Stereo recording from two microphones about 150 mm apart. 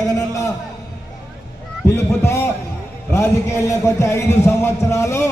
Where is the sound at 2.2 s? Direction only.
20° left (ahead or behind).